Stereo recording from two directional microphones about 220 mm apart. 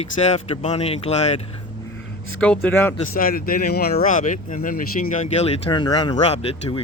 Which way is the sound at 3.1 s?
40° left (ahead or behind).